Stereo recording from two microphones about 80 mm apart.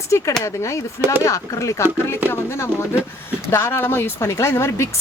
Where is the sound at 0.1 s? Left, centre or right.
Left.